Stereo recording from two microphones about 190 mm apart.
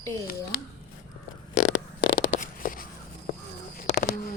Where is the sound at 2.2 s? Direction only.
45° left (ahead or behind).